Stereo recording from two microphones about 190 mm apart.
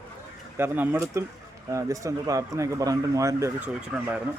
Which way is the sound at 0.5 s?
10° right (ahead or behind).